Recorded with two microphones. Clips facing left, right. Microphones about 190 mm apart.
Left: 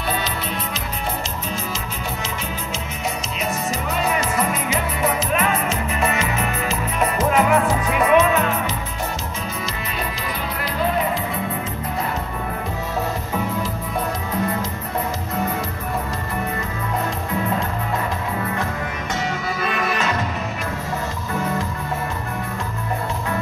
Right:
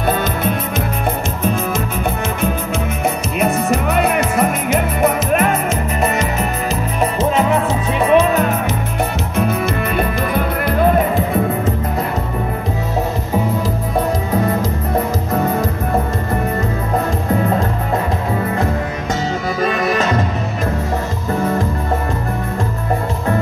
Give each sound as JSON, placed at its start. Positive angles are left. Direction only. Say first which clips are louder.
{"t": 0.2, "sound": "music", "louder": "right 8 dB", "side_deg": -50}
{"t": 3.3, "sound": "music", "louder": "right 11 dB", "side_deg": -55}
{"t": 7.0, "sound": "music", "louder": "right 2 dB", "side_deg": -25}
{"t": 19.6, "sound": "music", "louder": "right 7 dB", "side_deg": -35}